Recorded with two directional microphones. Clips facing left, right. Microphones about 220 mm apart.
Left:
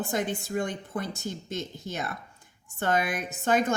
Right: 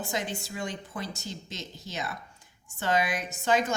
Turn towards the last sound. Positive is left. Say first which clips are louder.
# left 2 dB
turn(degrees=55)  # may be behind; listen again after turning